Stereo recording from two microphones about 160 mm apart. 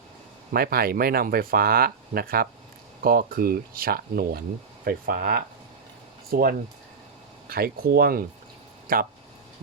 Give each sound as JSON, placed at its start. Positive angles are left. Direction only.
{"t": 0.5, "sound": "speech", "side_deg": -70}